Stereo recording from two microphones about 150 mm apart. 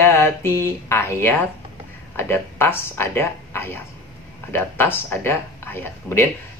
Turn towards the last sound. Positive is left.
turn(degrees=15)  # may be behind; listen again after turning